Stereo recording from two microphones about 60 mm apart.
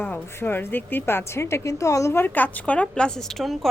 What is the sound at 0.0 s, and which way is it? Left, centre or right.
Speech, left.